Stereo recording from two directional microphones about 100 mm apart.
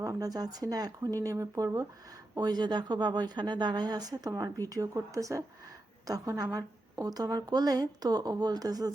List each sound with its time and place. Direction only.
0.0 s a woman's voice: 35° right (ahead or behind)